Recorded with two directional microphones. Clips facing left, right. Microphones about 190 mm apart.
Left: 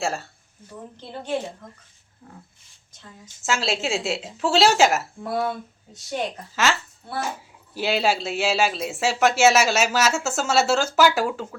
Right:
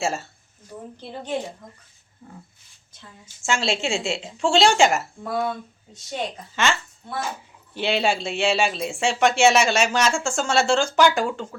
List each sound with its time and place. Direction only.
0.0 s speech: centre (ahead or behind)
1.1 s a woman's voice: 15° right (ahead or behind)
3.4 s speech: centre (ahead or behind)
6.6 s speech: 5° left (ahead or behind)